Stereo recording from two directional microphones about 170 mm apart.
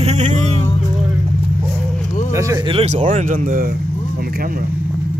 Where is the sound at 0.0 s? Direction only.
40° right (ahead or behind).